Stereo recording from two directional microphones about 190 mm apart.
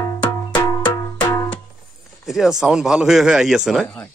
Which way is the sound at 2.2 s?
Centre (ahead or behind).